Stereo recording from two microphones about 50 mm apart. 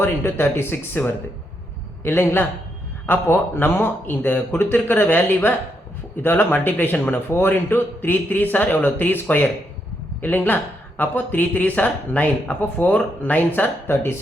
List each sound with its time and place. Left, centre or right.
0.0 s a man's voice: left
2.0 s a man's voice: left
13.8 s a man's voice: left